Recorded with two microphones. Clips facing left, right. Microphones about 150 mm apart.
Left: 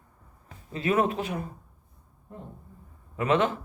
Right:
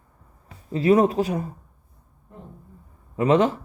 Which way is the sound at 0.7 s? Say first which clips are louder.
Right 7 dB; 35° right (ahead or behind).